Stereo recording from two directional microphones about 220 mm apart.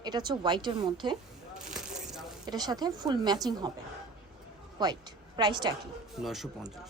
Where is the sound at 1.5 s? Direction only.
5° right (ahead or behind).